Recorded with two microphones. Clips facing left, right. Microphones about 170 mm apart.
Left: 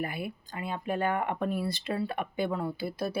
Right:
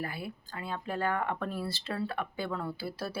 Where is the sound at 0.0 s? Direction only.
20° left (ahead or behind).